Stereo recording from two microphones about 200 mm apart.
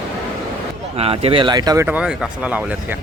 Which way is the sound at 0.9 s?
30° right (ahead or behind).